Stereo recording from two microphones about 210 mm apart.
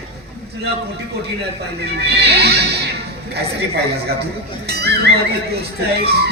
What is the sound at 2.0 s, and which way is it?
Music, 50° right (ahead or behind).